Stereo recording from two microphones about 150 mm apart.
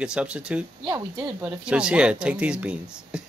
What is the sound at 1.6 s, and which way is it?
Speech, 5° right (ahead or behind).